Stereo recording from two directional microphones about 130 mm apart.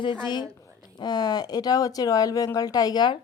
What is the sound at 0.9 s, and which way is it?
A woman's voice, 30° left (ahead or behind).